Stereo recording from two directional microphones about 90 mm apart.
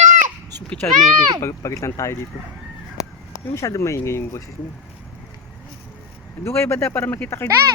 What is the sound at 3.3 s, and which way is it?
Speech, 35° left (ahead or behind).